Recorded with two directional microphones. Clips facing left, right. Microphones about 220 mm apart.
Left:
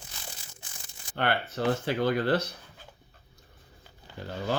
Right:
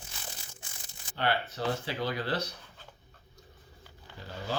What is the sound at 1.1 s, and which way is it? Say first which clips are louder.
Speech: left 2 dB; 55° left (ahead or behind).